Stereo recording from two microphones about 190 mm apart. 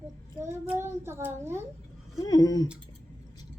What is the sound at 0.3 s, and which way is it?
A child's voice, 10° right (ahead or behind).